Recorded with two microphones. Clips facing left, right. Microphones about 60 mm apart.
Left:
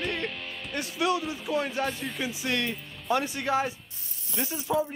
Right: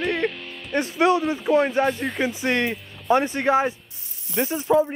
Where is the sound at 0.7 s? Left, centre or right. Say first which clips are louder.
Right 8 dB; right.